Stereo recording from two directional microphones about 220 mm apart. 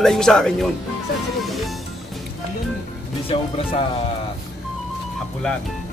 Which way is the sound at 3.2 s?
25° left (ahead or behind).